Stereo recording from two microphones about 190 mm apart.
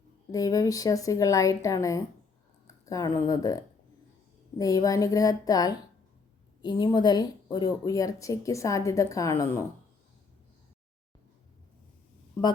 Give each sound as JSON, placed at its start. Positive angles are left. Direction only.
{"t": 0.3, "sound": "speech", "side_deg": 20}